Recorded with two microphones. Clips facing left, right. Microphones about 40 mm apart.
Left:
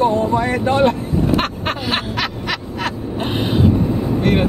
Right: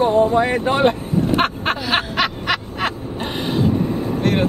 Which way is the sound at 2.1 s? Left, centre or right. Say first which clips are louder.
Right 2 dB; right.